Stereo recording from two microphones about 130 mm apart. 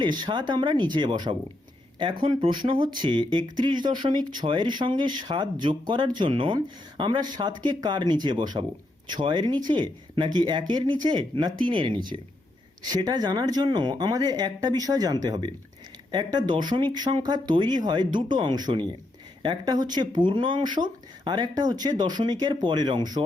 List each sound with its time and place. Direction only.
0.0 s speech: 35° right (ahead or behind)